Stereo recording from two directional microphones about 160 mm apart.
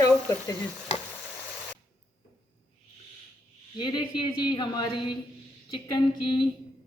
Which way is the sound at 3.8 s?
30° left (ahead or behind).